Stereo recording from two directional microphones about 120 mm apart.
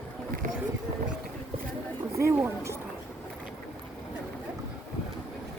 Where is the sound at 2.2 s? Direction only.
25° right (ahead or behind).